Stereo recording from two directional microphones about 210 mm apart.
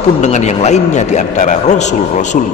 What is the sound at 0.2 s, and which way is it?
A man's voice, 35° left (ahead or behind).